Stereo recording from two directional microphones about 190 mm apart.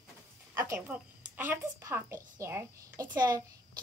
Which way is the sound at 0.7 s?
10° right (ahead or behind).